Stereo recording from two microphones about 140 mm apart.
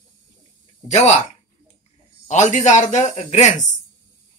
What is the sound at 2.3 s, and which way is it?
Speech, 60° left (ahead or behind).